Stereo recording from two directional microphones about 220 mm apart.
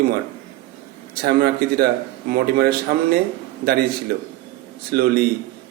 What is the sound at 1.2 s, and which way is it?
Speech, 45° right (ahead or behind).